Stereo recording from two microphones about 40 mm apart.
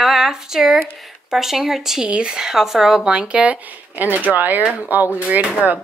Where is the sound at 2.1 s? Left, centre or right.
Right.